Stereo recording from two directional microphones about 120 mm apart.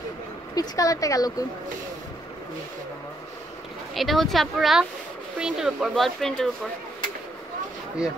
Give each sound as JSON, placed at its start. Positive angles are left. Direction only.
{"t": 0.6, "sound": "speech", "side_deg": 30}
{"t": 3.9, "sound": "speech", "side_deg": 0}